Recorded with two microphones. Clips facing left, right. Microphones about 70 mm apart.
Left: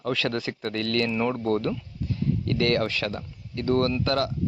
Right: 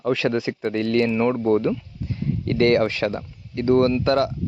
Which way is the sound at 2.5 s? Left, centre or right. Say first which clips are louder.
Right 7 dB; right.